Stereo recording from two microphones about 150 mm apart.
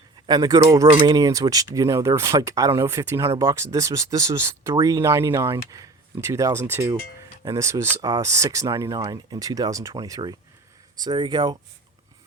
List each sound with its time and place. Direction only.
0.3 s speech: 25° right (ahead or behind)
0.9 s speech: 40° right (ahead or behind)
1.1 s speech: 25° right (ahead or behind)
5.8 s a sound: 20° right (ahead or behind)
6.7 s speech: 15° right (ahead or behind)